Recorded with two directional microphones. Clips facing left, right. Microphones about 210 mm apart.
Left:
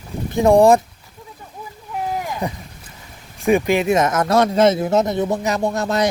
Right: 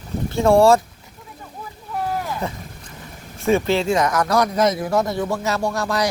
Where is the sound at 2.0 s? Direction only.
15° left (ahead or behind).